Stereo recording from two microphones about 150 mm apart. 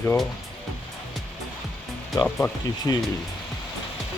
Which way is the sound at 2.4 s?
25° left (ahead or behind).